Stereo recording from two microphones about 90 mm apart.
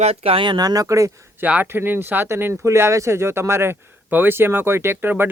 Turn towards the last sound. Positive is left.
turn(degrees=-25)  # may be behind; listen again after turning